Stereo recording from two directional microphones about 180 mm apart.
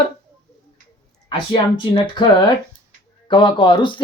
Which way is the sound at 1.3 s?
25° left (ahead or behind).